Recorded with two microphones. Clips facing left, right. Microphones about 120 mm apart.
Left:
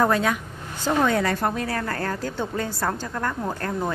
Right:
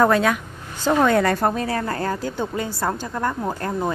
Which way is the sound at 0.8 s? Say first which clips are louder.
Right 4 dB; 60° right (ahead or behind).